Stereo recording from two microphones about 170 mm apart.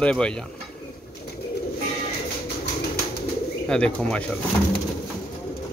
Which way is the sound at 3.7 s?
5° left (ahead or behind).